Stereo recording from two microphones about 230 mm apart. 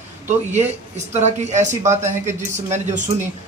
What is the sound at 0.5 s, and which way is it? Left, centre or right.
Speech, right.